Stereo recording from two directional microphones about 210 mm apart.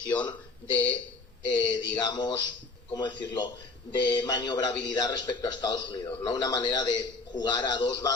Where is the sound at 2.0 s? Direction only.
20° left (ahead or behind).